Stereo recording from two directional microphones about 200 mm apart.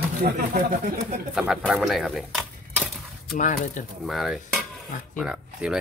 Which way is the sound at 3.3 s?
40° left (ahead or behind).